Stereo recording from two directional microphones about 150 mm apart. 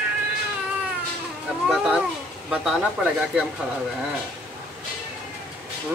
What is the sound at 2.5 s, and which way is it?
Speech, 5° right (ahead or behind).